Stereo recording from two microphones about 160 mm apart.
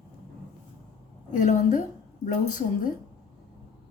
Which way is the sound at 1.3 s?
50° left (ahead or behind).